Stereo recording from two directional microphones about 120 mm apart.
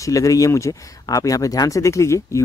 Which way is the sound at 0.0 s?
30° left (ahead or behind).